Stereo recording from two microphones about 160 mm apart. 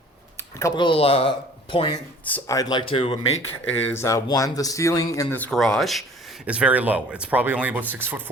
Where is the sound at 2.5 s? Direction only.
25° left (ahead or behind).